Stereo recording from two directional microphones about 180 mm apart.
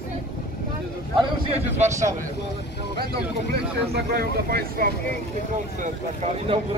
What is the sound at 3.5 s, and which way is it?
Speech, 60° right (ahead or behind).